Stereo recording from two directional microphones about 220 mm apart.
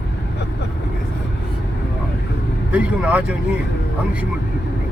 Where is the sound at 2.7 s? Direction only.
5° right (ahead or behind).